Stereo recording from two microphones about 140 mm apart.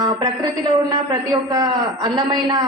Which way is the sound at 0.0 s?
30° right (ahead or behind).